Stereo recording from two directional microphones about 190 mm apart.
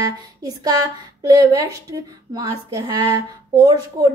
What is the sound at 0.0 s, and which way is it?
Speech, 20° right (ahead or behind).